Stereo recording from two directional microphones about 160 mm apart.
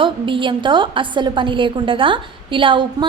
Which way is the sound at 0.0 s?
30° right (ahead or behind).